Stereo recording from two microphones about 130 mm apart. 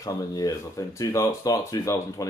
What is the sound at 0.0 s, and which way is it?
Speech, 25° left (ahead or behind).